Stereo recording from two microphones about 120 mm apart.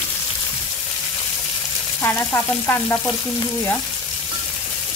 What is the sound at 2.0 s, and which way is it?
Frying, 20° left (ahead or behind).